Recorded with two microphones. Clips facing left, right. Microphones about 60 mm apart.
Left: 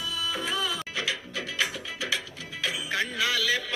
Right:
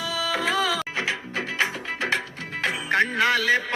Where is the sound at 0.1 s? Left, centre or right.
Right.